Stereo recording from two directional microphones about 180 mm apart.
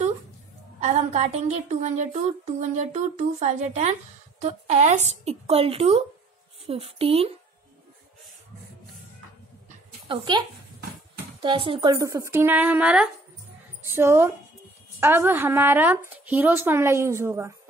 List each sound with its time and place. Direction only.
0.7 s a woman's voice: 40° right (ahead or behind)
10.0 s speech: 25° right (ahead or behind)
11.4 s speech: 30° right (ahead or behind)